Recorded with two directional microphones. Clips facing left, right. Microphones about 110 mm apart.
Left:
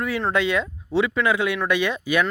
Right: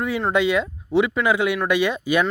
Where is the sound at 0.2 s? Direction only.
10° right (ahead or behind).